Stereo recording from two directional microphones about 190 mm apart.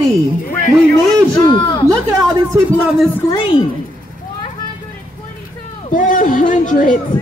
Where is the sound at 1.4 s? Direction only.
20° left (ahead or behind).